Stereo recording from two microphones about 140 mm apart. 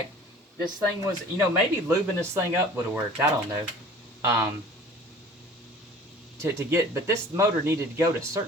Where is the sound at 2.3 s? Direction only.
15° right (ahead or behind).